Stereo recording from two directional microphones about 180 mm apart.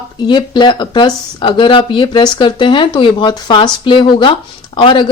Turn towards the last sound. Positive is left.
turn(degrees=25)  # may be behind; listen again after turning